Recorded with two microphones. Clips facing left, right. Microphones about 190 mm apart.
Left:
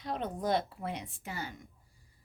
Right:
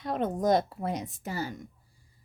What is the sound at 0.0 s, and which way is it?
Speech, 50° right (ahead or behind).